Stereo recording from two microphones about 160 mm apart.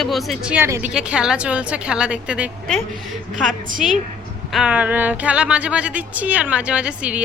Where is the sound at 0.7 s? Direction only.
15° right (ahead or behind).